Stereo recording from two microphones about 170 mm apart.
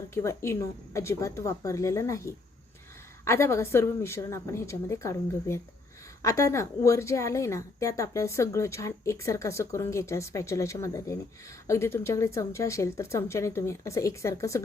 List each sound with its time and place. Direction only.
0.1 s a woman's voice: 15° left (ahead or behind)